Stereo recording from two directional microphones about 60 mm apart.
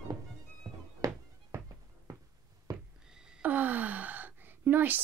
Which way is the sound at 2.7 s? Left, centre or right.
Right.